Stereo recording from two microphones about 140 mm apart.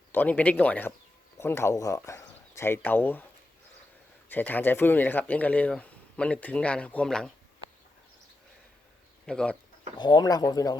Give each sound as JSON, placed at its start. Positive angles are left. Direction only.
{"t": 0.1, "sound": "speech", "side_deg": 10}
{"t": 4.3, "sound": "speech", "side_deg": 15}
{"t": 9.2, "sound": "speech", "side_deg": 5}
{"t": 10.0, "sound": "speech", "side_deg": 30}